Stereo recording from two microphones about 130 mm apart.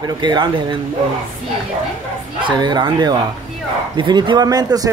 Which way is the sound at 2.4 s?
35° right (ahead or behind).